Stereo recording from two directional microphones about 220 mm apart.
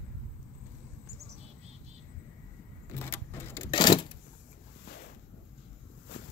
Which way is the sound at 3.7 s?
20° left (ahead or behind).